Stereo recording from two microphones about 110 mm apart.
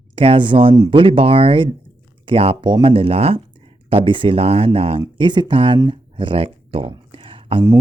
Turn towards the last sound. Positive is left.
turn(degrees=-55)  # may be behind; listen again after turning